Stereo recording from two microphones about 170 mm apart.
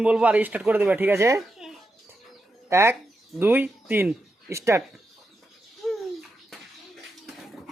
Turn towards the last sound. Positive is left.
turn(degrees=0)  # may be behind; listen again after turning